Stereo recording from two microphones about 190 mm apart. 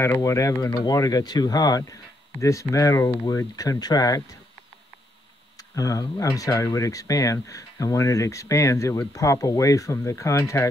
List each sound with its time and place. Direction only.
0.0 s speech: 15° left (ahead or behind)
5.6 s speech: 20° left (ahead or behind)